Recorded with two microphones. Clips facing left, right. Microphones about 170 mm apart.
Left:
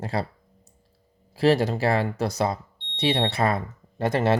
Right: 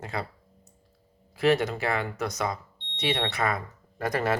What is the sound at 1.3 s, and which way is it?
Speech, 30° left (ahead or behind).